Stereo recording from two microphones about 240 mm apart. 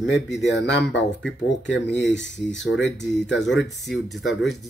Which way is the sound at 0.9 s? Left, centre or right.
Left.